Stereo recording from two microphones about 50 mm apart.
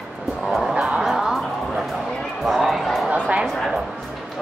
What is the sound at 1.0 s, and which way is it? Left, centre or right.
Music, centre.